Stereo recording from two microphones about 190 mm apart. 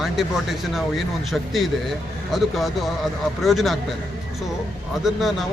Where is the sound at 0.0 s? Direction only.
Centre (ahead or behind).